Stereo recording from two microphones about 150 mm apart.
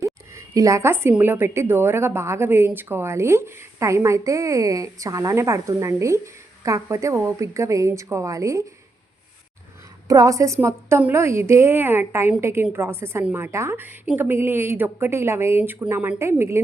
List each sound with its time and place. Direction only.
0.0 s speech: 20° right (ahead or behind)
10.1 s a woman's voice: 20° right (ahead or behind)